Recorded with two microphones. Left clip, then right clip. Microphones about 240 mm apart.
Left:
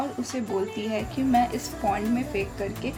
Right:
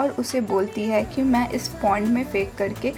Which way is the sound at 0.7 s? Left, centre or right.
Right.